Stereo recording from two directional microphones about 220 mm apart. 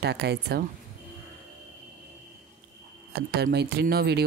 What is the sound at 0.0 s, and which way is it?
Speech, 50° right (ahead or behind).